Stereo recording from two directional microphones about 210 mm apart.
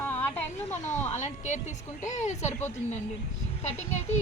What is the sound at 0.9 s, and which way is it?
Speech, 35° left (ahead or behind).